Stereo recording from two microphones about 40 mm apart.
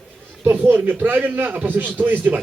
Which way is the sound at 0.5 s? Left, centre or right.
Right.